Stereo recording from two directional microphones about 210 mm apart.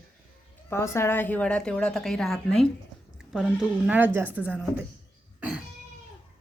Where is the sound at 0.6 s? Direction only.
10° left (ahead or behind); by 4.7 s 5° right (ahead or behind).